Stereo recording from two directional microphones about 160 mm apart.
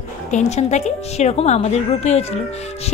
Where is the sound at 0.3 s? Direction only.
45° left (ahead or behind).